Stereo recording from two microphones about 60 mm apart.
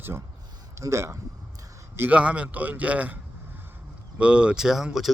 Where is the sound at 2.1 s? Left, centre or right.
Right.